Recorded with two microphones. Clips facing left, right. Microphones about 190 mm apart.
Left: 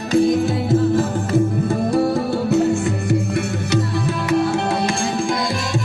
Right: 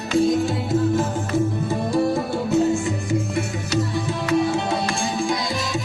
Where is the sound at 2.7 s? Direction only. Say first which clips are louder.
Left 3 dB; 65° left (ahead or behind).